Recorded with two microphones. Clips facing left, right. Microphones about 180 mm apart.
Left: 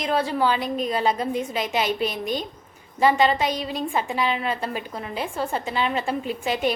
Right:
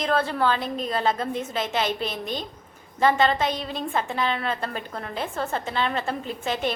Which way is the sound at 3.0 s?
10° left (ahead or behind).